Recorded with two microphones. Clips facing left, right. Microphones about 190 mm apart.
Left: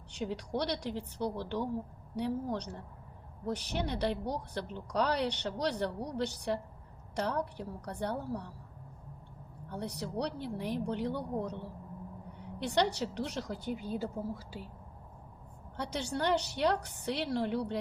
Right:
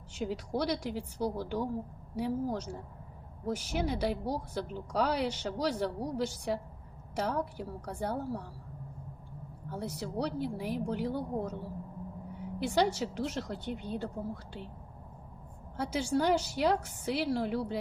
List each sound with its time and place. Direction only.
0.1 s a woman's voice: 5° right (ahead or behind)
9.6 s a woman's voice: 5° right (ahead or behind)
15.8 s a woman's voice: 5° right (ahead or behind)